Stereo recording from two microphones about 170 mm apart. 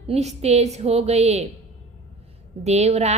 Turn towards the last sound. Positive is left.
turn(degrees=-40)  # may be behind; listen again after turning